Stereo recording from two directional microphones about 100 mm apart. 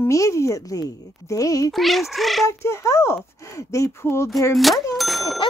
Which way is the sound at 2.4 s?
30° left (ahead or behind).